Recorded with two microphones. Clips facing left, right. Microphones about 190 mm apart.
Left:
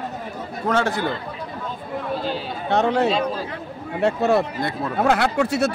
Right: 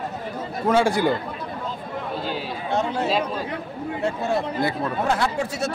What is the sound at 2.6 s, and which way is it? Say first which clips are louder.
Speech: left 5 dB; 70° left (ahead or behind).